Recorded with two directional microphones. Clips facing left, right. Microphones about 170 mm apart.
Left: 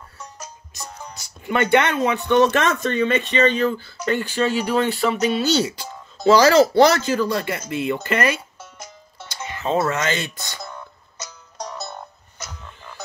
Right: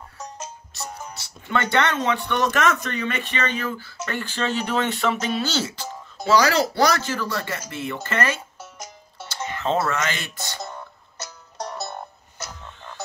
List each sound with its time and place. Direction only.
1.5 s speech: 15° left (ahead or behind)
5.5 s speech: 15° left (ahead or behind)
6.3 s speech: 25° left (ahead or behind)
9.3 s music: 10° left (ahead or behind)
9.8 s speech: 20° left (ahead or behind)